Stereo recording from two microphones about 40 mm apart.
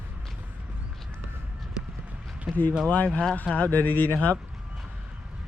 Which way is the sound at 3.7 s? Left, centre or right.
Left.